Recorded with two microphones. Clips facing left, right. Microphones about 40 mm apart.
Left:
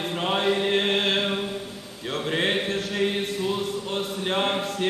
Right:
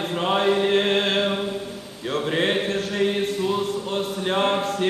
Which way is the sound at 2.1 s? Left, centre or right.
Centre.